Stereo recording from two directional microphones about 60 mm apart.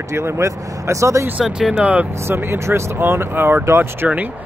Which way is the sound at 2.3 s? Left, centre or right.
Right.